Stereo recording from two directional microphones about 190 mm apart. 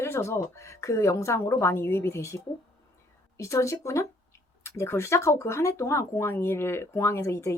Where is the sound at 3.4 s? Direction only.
15° left (ahead or behind).